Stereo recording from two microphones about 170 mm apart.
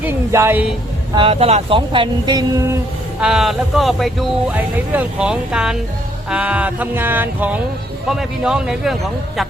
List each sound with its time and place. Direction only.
0.0 s a sound: 15° right (ahead or behind)
1.1 s speech: 35° right (ahead or behind)
3.2 s speech: 5° right (ahead or behind)
6.3 s music: 10° right (ahead or behind)
8.1 s speech: 5° right (ahead or behind)